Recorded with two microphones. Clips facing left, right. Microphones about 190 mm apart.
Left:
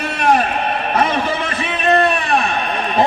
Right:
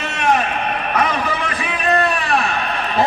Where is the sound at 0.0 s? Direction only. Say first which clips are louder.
Left 2 dB; 35° left (ahead or behind).